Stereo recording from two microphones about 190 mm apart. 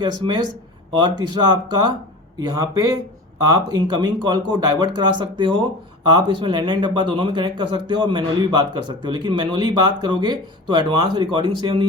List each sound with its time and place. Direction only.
0.9 s speech: 20° right (ahead or behind)